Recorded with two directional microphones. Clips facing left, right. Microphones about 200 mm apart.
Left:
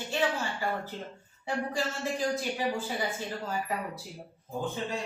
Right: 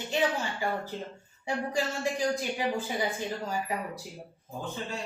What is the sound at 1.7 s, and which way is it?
Speech, 15° right (ahead or behind).